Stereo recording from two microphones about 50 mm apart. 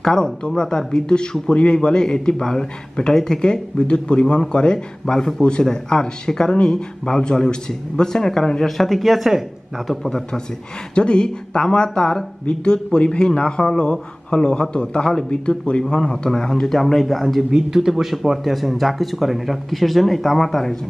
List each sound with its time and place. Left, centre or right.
0.0 s speech: centre
10.0 s speech: centre
17.5 s speech: centre